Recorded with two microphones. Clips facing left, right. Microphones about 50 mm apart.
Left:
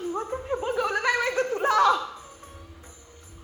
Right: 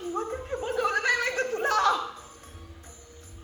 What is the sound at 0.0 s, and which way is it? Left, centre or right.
Chuckle, left.